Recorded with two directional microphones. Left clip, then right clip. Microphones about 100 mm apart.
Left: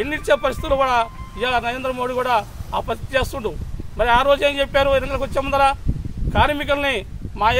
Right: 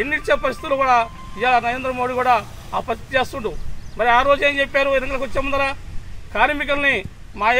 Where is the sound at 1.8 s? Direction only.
45° left (ahead or behind).